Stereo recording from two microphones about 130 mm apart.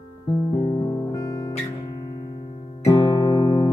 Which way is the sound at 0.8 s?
25° left (ahead or behind).